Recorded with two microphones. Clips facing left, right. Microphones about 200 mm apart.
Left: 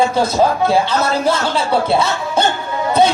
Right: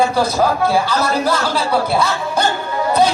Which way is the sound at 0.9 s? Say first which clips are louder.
Left 1 dB; 25° left (ahead or behind).